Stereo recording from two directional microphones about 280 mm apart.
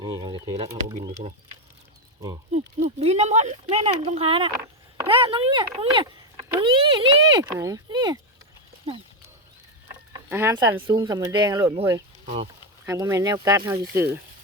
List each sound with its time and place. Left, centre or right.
0.0 s speech: centre
2.5 s speech: right
10.1 s speech: centre